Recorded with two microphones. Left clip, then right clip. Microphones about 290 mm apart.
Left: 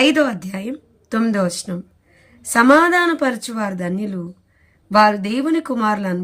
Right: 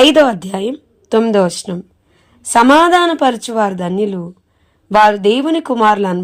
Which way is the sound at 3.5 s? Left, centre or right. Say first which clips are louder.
Right 10 dB; right.